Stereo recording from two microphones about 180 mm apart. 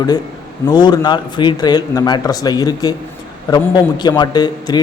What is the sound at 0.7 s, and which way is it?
A man's voice, 25° left (ahead or behind).